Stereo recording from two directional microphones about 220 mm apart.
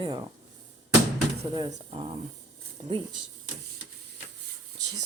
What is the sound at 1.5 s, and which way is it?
Speech, 20° right (ahead or behind).